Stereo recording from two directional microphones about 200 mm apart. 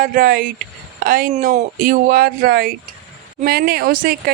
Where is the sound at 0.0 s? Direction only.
45° right (ahead or behind).